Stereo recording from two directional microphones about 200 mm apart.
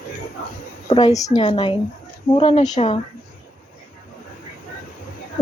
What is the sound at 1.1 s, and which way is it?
Speech, 15° left (ahead or behind).